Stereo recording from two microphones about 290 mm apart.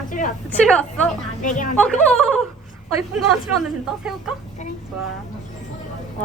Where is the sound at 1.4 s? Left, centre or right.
Left.